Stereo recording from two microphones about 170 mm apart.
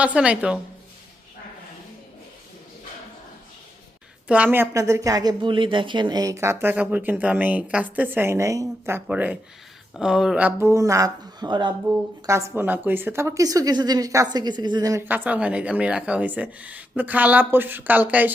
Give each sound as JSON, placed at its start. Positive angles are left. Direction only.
{"t": 0.0, "sound": "a woman's voice", "side_deg": -5}
{"t": 4.3, "sound": "a woman's voice", "side_deg": -10}